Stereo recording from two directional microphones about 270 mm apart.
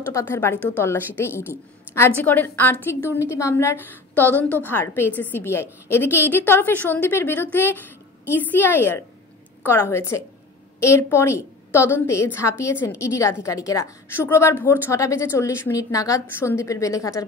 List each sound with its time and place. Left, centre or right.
0.1 s a woman's voice: centre